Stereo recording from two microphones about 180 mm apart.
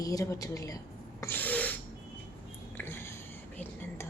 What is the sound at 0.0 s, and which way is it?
Speech, 20° left (ahead or behind).